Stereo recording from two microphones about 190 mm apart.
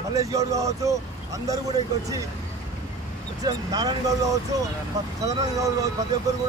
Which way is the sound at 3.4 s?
20° right (ahead or behind).